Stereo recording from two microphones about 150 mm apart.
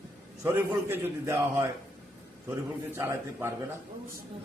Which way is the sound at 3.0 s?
15° right (ahead or behind).